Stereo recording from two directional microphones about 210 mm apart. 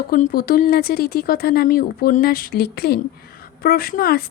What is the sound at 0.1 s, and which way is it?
Speech, 45° left (ahead or behind).